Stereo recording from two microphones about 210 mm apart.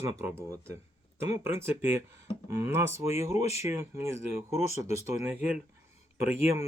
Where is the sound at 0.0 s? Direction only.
15° right (ahead or behind).